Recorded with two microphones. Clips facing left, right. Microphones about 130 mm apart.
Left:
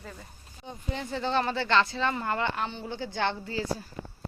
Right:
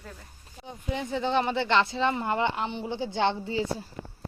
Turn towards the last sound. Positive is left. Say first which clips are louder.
# right 4 dB
turn(degrees=-25)  # may be behind; listen again after turning